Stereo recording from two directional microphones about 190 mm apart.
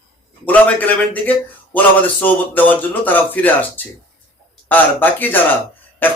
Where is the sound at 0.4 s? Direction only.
10° left (ahead or behind).